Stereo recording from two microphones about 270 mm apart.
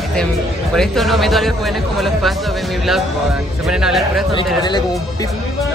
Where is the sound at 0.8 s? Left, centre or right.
Centre.